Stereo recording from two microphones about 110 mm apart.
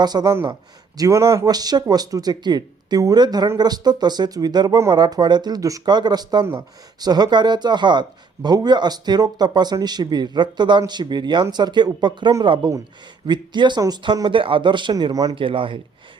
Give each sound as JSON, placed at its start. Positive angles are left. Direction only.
{"t": 0.0, "sound": "speech", "side_deg": -40}
{"t": 15.4, "sound": "speech", "side_deg": -50}